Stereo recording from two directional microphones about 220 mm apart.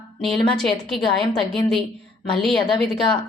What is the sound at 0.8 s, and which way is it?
A woman's voice, centre (ahead or behind).